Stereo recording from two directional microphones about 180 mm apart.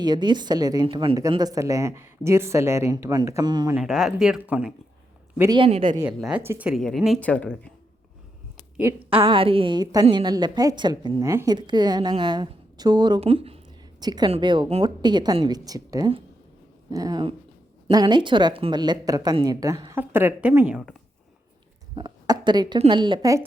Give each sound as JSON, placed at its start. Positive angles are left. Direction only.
{"t": 0.0, "sound": "a woman's voice", "side_deg": -25}
{"t": 3.8, "sound": "speech", "side_deg": -5}
{"t": 5.4, "sound": "a woman's voice", "side_deg": -20}
{"t": 5.6, "sound": "speech", "side_deg": -35}
{"t": 6.1, "sound": "speech", "side_deg": -5}
{"t": 9.0, "sound": "a woman's voice", "side_deg": -30}
{"t": 21.9, "sound": "a woman's voice", "side_deg": -25}